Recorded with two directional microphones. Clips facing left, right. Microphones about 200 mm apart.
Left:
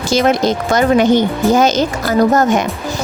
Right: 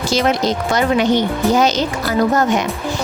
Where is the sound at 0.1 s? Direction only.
50° left (ahead or behind).